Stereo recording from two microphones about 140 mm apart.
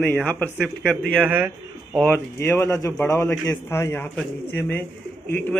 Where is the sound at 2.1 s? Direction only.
20° left (ahead or behind).